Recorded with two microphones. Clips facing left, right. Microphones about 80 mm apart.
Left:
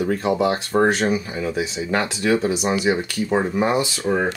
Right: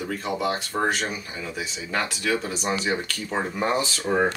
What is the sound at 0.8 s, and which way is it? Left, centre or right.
Speech, left.